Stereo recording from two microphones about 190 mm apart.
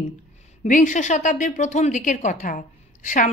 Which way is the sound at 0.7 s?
40° left (ahead or behind).